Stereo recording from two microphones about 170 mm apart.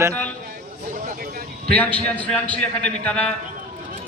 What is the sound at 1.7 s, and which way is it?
A man's voice, 10° left (ahead or behind).